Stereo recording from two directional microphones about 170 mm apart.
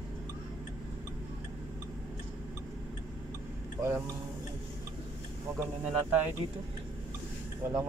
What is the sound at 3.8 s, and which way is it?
Speech, 15° right (ahead or behind).